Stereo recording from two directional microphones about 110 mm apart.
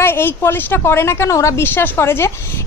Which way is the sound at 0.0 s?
20° left (ahead or behind).